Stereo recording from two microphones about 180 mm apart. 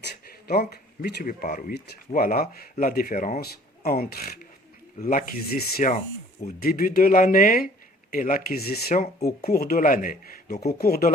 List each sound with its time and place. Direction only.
0.3 s speech: 55° left (ahead or behind)
3.4 s speech: 55° left (ahead or behind)
4.9 s speech: 45° left (ahead or behind)